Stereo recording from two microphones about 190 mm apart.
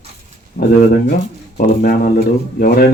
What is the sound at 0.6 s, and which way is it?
Speech, 50° left (ahead or behind).